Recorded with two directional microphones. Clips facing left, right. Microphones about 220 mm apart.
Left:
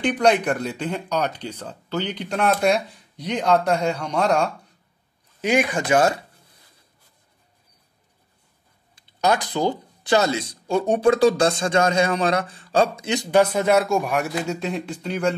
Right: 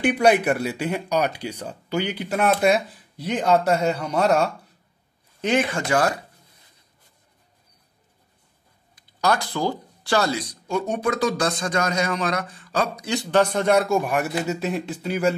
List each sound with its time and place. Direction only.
0.0 s speech: 10° right (ahead or behind)
5.4 s speech: 10° left (ahead or behind)
8.9 s speech: 20° left (ahead or behind); by 15.3 s 5° right (ahead or behind)